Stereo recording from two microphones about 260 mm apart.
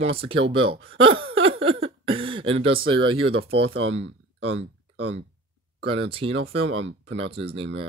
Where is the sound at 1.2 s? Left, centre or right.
Right.